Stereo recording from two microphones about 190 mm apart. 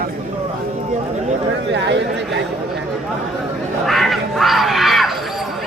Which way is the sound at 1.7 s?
65° right (ahead or behind).